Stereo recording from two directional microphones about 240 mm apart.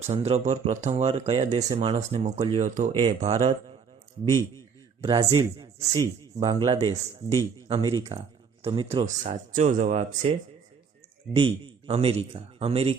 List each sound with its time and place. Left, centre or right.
0.0 s speech: right
2.9 s a man's voice: centre
4.9 s a man's voice: centre
11.3 s speech: right